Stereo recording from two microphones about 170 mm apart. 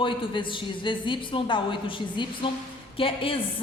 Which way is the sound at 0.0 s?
30° left (ahead or behind).